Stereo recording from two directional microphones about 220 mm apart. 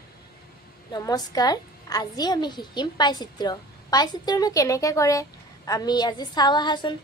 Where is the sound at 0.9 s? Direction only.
15° left (ahead or behind).